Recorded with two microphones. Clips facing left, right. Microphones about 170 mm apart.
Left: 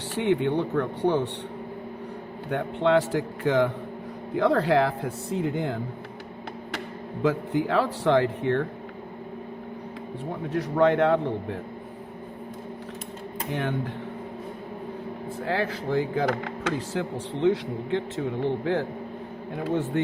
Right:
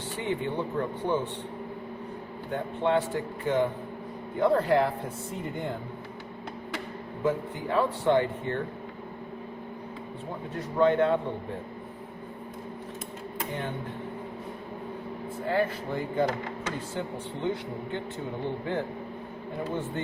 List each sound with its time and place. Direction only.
0.2 s a man's voice: 70° left (ahead or behind)
2.5 s a man's voice: 70° left (ahead or behind)
4.4 s speech: 90° left
7.2 s speech: 80° left
10.5 s a man's voice: 75° left (ahead or behind)
13.5 s a man's voice: 75° left (ahead or behind)
15.4 s speech: 90° left